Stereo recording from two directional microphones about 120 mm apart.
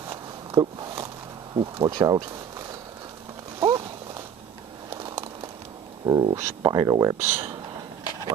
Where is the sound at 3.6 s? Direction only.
30° right (ahead or behind).